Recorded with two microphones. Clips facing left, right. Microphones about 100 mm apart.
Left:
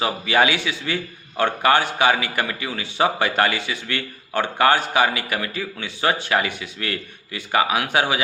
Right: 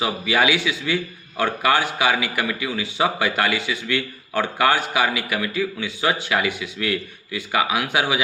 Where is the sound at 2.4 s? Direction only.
40° left (ahead or behind).